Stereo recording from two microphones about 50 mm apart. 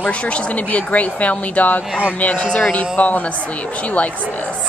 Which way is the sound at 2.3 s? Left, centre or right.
Left.